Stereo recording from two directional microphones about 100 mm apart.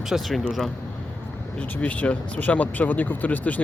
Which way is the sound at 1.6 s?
15° left (ahead or behind).